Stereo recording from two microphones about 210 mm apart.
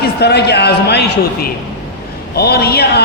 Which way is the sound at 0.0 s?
50° left (ahead or behind).